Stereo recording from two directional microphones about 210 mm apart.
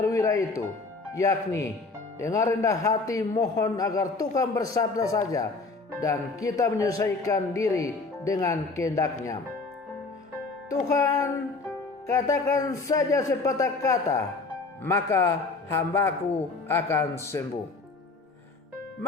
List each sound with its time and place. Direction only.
0.0 s music: 15° left (ahead or behind)
1.1 s a man's voice: 15° left (ahead or behind)
10.7 s music: 15° left (ahead or behind)
12.0 s a man's voice: 15° left (ahead or behind)